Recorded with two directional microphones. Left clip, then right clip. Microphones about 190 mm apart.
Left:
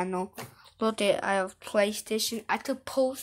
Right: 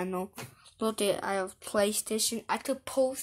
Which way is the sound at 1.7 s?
15° right (ahead or behind).